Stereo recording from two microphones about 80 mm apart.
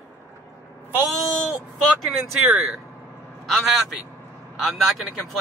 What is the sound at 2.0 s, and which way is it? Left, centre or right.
Speech, centre.